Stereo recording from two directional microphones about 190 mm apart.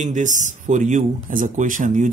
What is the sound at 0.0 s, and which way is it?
Speech, 40° right (ahead or behind).